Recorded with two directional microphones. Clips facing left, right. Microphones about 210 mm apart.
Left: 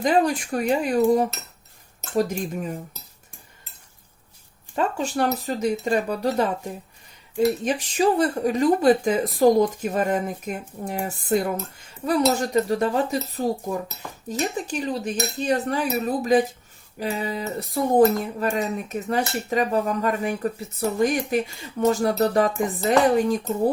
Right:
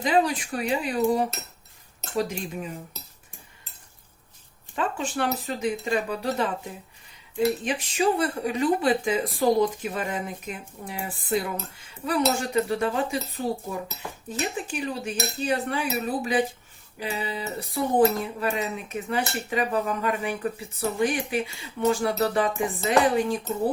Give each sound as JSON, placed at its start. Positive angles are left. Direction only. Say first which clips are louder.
{"t": 0.0, "sound": "speech", "louder": "left 3 dB", "side_deg": 45}
{"t": 2.1, "sound": "speech", "louder": "left 4 dB", "side_deg": 45}
{"t": 4.7, "sound": "speech", "louder": "left 4 dB", "side_deg": 40}